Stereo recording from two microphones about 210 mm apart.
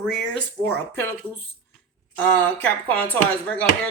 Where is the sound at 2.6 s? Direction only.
10° left (ahead or behind).